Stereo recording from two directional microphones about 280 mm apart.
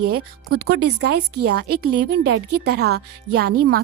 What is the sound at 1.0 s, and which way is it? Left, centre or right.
A woman's voice, right.